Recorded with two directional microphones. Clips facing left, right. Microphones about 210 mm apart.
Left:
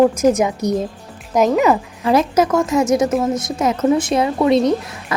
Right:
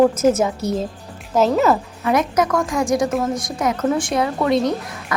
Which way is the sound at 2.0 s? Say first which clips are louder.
Left 5 dB; 30° left (ahead or behind).